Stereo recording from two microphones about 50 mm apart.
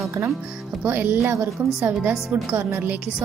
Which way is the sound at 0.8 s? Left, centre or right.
Right.